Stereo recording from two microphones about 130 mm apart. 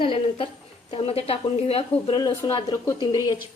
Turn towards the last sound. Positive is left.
turn(degrees=30)  # may be behind; listen again after turning